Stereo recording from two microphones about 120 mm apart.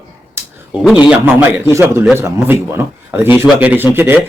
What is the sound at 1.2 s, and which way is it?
A man's voice, 15° right (ahead or behind).